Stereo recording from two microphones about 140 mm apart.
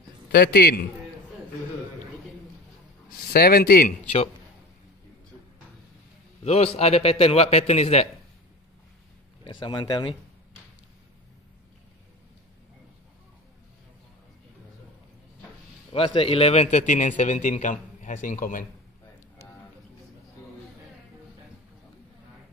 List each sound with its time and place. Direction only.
0.3 s a man's voice: 90° left
3.1 s a man's voice: 90° left
6.4 s a man's voice: 50° left (ahead or behind)
9.4 s speech: 35° left (ahead or behind)
15.9 s a man's voice: 40° left (ahead or behind); by 18.7 s 75° left (ahead or behind)